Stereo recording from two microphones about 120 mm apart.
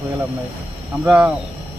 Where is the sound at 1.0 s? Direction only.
10° right (ahead or behind).